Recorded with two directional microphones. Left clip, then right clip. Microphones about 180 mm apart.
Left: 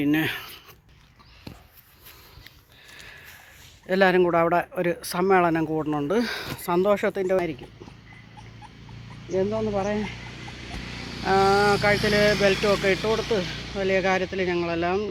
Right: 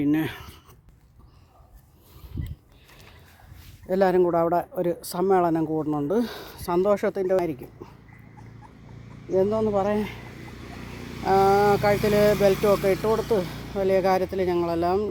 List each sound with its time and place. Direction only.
0.0 s speech: 5° right (ahead or behind)
3.8 s speech: 15° right (ahead or behind)
5.6 s speech: 5° left (ahead or behind)
6.1 s speech: 10° right (ahead or behind)
9.3 s speech: 20° right (ahead or behind)
11.2 s speech: centre (ahead or behind)
13.1 s speech: 10° left (ahead or behind)
13.7 s speech: 15° right (ahead or behind)